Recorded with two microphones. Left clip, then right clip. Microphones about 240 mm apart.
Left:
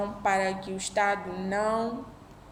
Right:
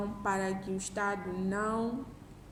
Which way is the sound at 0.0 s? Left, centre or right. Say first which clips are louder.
Left 7 dB; left.